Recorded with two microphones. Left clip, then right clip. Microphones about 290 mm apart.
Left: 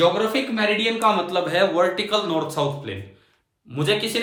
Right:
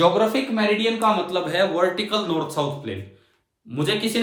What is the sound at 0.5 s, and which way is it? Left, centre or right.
A man's voice, centre.